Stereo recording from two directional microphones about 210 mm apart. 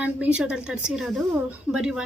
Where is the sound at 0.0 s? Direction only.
5° right (ahead or behind).